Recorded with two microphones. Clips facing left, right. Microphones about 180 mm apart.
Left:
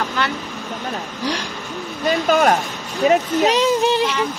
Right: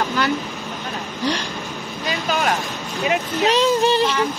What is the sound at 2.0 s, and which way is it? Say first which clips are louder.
Vehicle: left 7 dB; 45° left (ahead or behind).